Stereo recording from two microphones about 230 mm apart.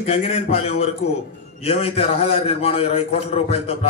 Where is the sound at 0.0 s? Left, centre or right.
Left.